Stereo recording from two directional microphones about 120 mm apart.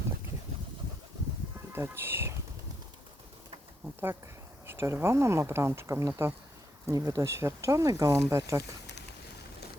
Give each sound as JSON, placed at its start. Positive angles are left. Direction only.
{"t": 1.7, "sound": "speech", "side_deg": -20}
{"t": 4.6, "sound": "speech", "side_deg": -20}